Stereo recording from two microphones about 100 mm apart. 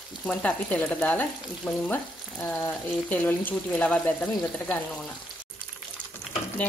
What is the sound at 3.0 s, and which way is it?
Speech, 15° left (ahead or behind).